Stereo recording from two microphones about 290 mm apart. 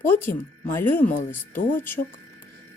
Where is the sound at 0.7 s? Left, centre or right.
Centre.